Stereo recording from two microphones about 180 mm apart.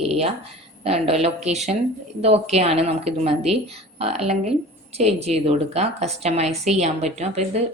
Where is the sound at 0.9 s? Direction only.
35° right (ahead or behind).